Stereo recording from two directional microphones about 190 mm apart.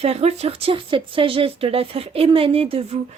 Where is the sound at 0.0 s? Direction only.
35° right (ahead or behind).